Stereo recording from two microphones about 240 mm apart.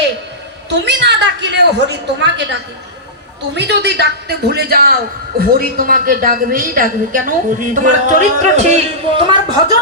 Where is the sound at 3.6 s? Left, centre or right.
Right.